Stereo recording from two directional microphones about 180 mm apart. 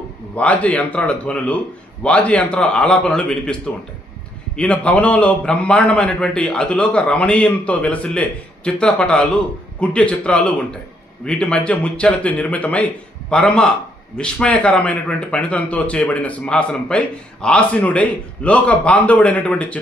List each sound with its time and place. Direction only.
0.4 s a man's voice: 10° left (ahead or behind)